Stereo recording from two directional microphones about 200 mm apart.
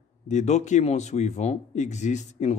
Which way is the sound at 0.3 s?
35° left (ahead or behind).